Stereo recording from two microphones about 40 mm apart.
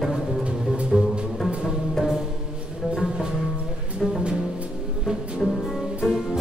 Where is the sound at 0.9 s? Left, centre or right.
Centre.